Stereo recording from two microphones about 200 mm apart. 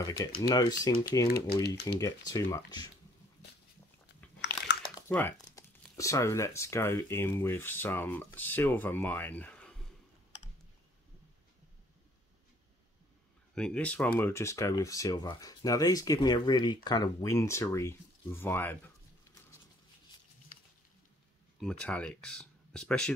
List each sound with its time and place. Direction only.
0.4 s speech: 20° left (ahead or behind)
1.2 s speech: 50° left (ahead or behind)
1.6 s speech: 15° left (ahead or behind)
5.0 s speech: 10° left (ahead or behind)
13.6 s speech: 5° left (ahead or behind)
21.5 s speech: 5° left (ahead or behind)